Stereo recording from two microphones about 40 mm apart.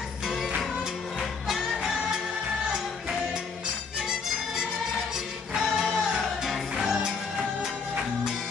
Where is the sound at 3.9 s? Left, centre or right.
Centre.